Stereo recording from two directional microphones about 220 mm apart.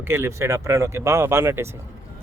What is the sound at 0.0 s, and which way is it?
Speech, 10° right (ahead or behind).